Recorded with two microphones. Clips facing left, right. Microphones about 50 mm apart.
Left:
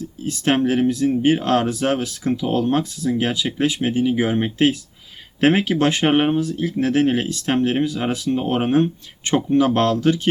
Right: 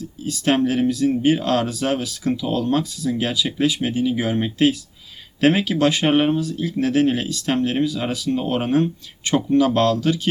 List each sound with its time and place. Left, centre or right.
0.0 s speech: left
6.4 s speech: left